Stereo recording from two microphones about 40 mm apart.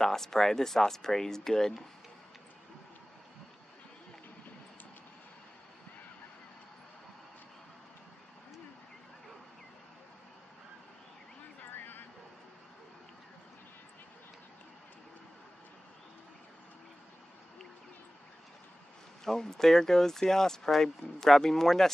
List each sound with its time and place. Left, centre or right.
0.0 s speech: centre
11.7 s a sound: left
19.2 s speech: centre